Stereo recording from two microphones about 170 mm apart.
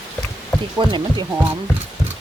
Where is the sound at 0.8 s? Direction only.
25° right (ahead or behind).